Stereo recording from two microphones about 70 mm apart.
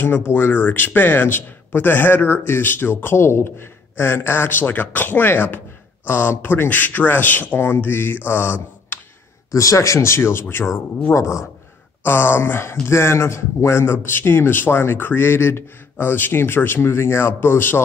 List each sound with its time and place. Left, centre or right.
0.0 s speech: left
9.5 s speech: left
12.0 s speech: left